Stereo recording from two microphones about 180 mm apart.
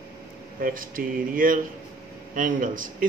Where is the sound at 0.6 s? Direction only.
50° right (ahead or behind).